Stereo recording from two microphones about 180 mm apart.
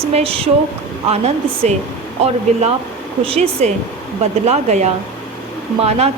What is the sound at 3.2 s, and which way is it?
Speech, 35° right (ahead or behind).